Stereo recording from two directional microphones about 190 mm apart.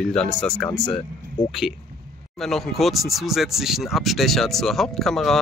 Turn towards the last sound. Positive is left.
turn(degrees=0)  # may be behind; listen again after turning